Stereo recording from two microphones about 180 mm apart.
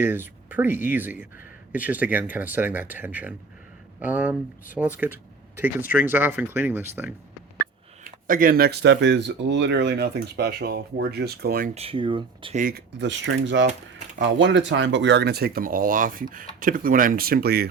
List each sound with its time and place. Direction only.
0.0 s speech: 10° right (ahead or behind)
4.8 s speech: 5° left (ahead or behind)
5.5 s speech: 10° right (ahead or behind)
8.0 s speech: 50° right (ahead or behind)
11.7 s speech: 35° right (ahead or behind)
12.5 s speech: 50° right (ahead or behind)
13.0 s speech: 90° right; by 17.7 s 60° right (ahead or behind)